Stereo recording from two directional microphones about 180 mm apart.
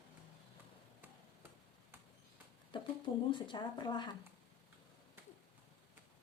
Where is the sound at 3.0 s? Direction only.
25° left (ahead or behind).